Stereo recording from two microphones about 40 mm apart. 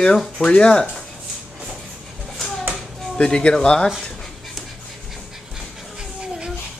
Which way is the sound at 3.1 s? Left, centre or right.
Centre.